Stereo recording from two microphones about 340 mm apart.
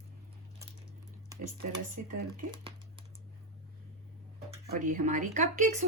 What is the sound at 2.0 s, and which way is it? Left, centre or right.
Speech, right.